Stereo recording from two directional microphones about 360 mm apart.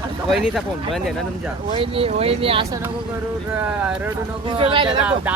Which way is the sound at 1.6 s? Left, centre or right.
Centre.